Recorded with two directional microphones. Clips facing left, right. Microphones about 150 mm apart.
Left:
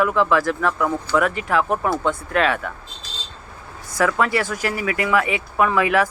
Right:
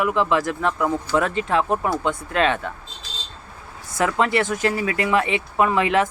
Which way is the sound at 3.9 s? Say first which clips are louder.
Left 1 dB; 20° right (ahead or behind).